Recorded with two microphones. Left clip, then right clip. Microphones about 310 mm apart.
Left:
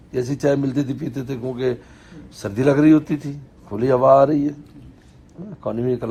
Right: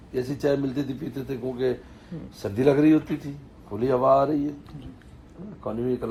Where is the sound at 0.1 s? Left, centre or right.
Left.